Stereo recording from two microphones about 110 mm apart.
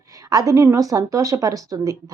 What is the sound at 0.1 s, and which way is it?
A woman's voice, 35° right (ahead or behind).